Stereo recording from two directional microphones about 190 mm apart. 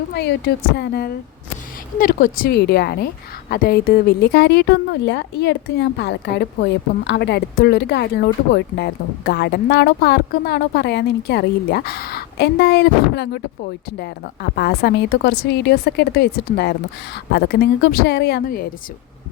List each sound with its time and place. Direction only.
0.1 s speech: 60° left (ahead or behind)
14.5 s speech: 55° left (ahead or behind)